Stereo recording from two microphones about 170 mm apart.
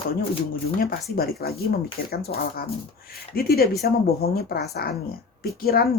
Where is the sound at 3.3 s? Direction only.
65° left (ahead or behind).